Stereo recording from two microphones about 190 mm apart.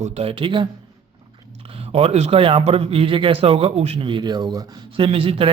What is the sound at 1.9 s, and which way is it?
A man's voice, 30° right (ahead or behind).